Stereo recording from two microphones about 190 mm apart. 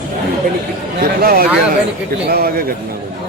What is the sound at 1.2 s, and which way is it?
A man's voice, 50° right (ahead or behind).